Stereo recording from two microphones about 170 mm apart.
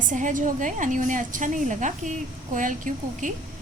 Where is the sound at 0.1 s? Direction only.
50° right (ahead or behind).